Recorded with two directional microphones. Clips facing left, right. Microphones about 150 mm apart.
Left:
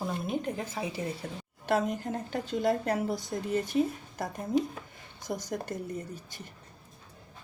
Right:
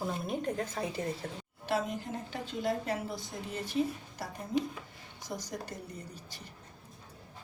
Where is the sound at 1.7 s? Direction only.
45° left (ahead or behind).